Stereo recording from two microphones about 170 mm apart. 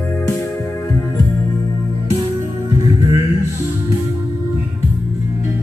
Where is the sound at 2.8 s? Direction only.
20° right (ahead or behind).